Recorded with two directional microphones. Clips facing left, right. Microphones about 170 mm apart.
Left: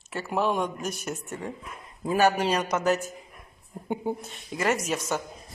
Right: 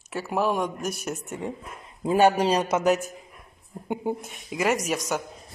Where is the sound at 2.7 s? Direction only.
15° right (ahead or behind).